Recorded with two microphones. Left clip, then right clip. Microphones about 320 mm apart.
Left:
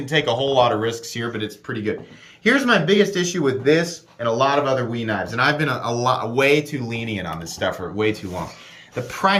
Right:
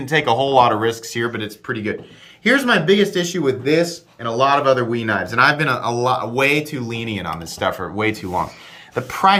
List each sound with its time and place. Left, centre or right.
0.0 s speech: centre